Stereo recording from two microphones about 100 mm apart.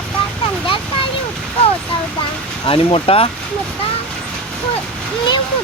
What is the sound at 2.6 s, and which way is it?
Speech, 70° left (ahead or behind).